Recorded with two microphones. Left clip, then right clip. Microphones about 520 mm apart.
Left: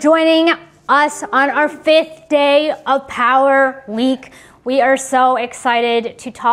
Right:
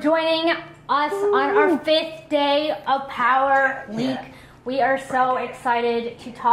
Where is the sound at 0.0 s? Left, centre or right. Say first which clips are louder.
Left 8 dB; left.